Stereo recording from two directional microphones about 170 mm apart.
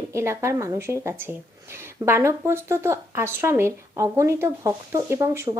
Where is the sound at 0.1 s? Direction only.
15° right (ahead or behind).